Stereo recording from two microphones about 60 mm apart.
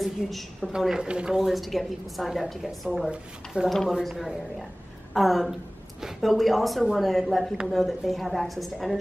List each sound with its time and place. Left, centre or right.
0.0 s a woman's voice: centre
0.7 s a woman's voice: centre
3.6 s speech: centre
3.9 s a woman's voice: centre